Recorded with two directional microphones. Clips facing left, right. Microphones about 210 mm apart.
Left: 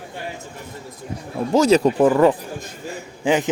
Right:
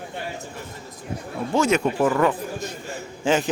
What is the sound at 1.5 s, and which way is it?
Speech, 35° left (ahead or behind).